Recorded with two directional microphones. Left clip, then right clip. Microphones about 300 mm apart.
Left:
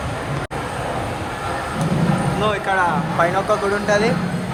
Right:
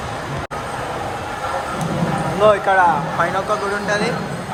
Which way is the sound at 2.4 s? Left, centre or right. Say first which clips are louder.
Right 7 dB; right.